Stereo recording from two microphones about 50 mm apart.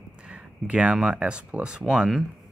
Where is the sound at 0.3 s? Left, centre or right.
Right.